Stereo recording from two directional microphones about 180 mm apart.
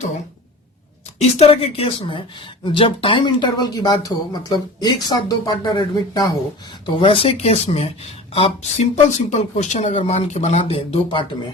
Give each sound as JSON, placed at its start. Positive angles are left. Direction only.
{"t": 1.2, "sound": "speech", "side_deg": 35}